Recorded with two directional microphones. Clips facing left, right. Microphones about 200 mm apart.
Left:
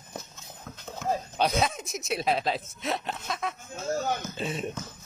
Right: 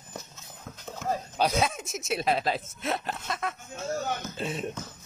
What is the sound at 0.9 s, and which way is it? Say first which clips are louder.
Speech: left 1 dB; centre (ahead or behind).